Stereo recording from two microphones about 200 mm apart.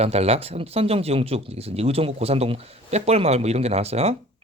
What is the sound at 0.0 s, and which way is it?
Speech, 30° right (ahead or behind).